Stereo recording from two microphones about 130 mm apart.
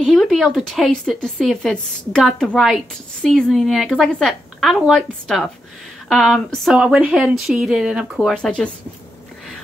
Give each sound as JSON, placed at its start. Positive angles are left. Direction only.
{"t": 0.0, "sound": "speech", "side_deg": 0}